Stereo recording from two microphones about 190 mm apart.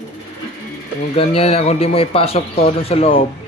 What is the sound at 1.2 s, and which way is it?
A man's voice, 30° left (ahead or behind).